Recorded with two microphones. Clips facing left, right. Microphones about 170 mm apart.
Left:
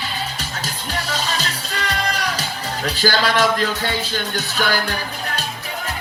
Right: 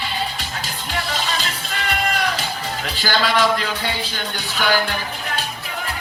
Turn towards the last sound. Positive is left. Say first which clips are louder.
# even
turn(degrees=40)  # may be behind; listen again after turning